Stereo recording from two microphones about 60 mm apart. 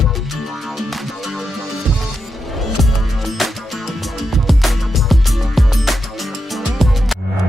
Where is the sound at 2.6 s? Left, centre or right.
Centre.